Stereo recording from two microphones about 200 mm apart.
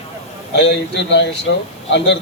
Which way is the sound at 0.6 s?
60° left (ahead or behind).